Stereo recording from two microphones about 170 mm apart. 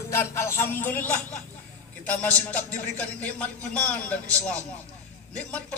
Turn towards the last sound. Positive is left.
turn(degrees=5)  # may be behind; listen again after turning